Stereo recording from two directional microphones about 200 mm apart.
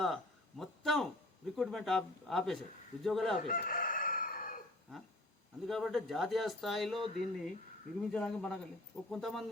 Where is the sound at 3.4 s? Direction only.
45° left (ahead or behind).